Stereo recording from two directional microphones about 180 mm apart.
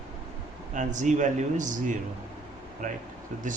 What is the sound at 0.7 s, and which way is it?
Speech, 45° right (ahead or behind).